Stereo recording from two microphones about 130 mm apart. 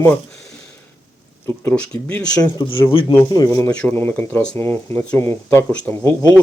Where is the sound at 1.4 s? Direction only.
20° left (ahead or behind).